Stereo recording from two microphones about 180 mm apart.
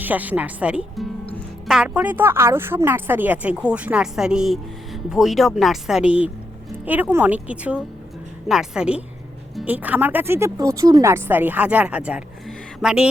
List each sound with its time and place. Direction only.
0.0 s speech: 10° right (ahead or behind)